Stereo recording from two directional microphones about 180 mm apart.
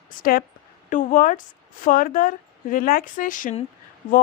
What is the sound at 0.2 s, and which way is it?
A woman's voice, 55° left (ahead or behind).